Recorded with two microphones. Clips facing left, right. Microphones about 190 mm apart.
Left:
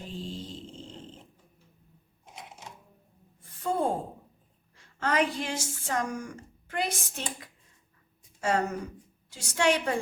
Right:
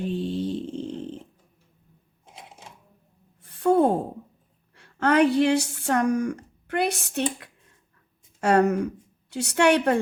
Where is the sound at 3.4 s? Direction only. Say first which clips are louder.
Right 10 dB; 65° right (ahead or behind).